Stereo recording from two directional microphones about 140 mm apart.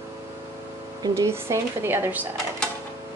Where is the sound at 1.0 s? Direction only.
20° right (ahead or behind).